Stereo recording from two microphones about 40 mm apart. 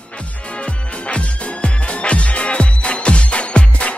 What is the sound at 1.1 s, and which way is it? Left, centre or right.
Music, left.